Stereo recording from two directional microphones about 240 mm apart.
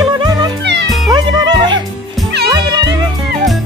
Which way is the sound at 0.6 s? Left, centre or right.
Right.